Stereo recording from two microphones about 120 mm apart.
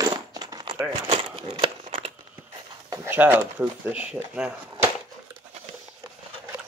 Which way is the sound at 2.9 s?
20° right (ahead or behind).